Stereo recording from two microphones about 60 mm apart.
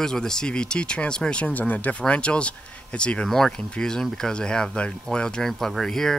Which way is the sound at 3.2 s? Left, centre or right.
Centre.